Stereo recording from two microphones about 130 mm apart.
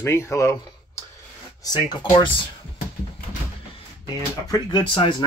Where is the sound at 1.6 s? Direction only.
30° left (ahead or behind).